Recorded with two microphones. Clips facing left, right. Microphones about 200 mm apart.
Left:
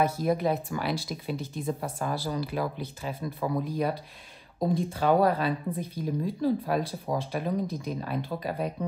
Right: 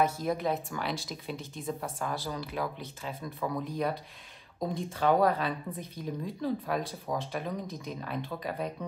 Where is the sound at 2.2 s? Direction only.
30° left (ahead or behind).